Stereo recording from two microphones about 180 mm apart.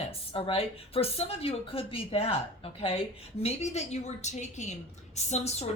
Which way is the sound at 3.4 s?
40° left (ahead or behind).